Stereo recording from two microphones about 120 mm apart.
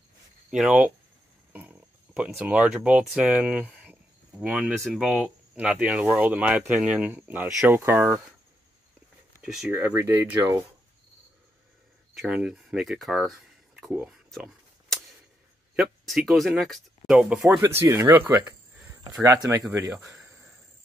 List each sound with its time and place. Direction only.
0.5 s speech: 10° right (ahead or behind)
9.4 s speech: 5° right (ahead or behind)
9.7 s speech: 20° right (ahead or behind)
12.1 s speech: 10° right (ahead or behind)
14.0 s a sound: 5° right (ahead or behind)
15.7 s speech: centre (ahead or behind)
17.6 s speech: 25° right (ahead or behind)
20.1 s a sound: 20° right (ahead or behind)